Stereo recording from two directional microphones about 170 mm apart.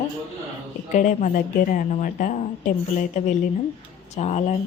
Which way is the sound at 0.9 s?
50° left (ahead or behind).